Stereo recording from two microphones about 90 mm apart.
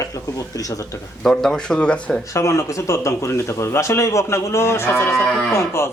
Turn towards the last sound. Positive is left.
turn(degrees=30)  # may be behind; listen again after turning